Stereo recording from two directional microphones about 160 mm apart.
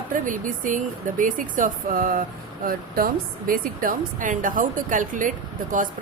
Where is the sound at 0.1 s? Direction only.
55° right (ahead or behind).